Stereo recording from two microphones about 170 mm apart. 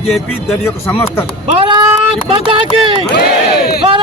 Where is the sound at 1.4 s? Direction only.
30° right (ahead or behind).